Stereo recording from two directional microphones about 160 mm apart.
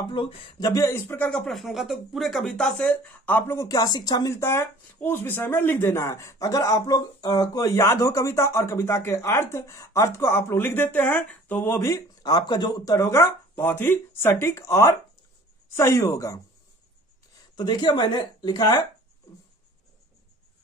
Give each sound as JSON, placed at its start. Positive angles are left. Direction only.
{"t": 0.1, "sound": "speech", "side_deg": 30}
{"t": 17.6, "sound": "speech", "side_deg": 30}